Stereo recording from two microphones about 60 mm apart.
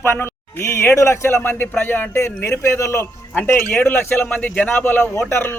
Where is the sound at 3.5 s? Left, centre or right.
Left.